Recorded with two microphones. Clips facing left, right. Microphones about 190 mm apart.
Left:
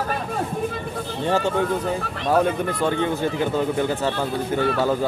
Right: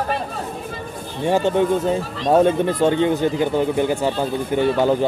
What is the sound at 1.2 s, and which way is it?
Speech, 15° right (ahead or behind).